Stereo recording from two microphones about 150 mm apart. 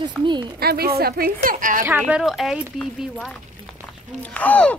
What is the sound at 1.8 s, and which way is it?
Speech, 15° right (ahead or behind).